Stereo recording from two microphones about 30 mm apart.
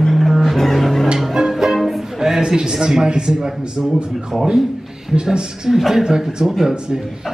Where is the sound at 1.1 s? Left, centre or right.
Centre.